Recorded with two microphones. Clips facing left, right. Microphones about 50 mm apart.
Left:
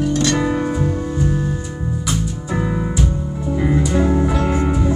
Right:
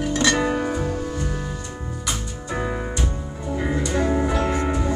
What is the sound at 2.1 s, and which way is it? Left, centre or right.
Music, centre.